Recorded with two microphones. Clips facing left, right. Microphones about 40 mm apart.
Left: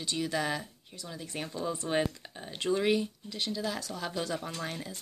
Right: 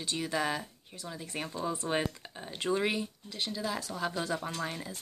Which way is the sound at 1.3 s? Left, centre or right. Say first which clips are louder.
Even; centre.